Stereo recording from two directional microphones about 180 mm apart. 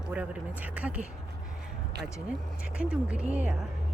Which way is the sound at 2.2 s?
5° right (ahead or behind).